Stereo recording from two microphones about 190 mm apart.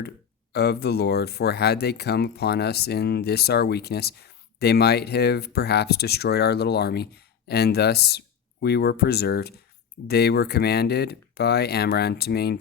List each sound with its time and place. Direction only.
0.5 s speech: 60° left (ahead or behind)